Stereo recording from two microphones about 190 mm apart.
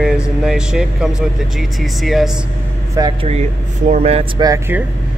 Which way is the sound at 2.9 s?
20° right (ahead or behind).